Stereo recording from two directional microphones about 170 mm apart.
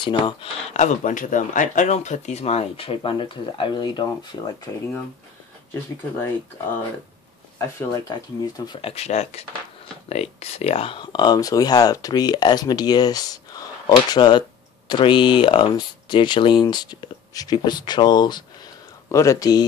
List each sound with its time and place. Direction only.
0.0 s speech: 30° left (ahead or behind)
0.7 s speech: 45° left (ahead or behind); by 4.4 s 25° left (ahead or behind)
8.1 s speech: 25° left (ahead or behind)
8.9 s speech: 40° left (ahead or behind); by 19.6 s 20° left (ahead or behind)